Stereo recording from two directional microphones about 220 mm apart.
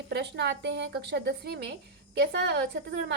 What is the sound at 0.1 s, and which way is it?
A woman's voice, 50° right (ahead or behind).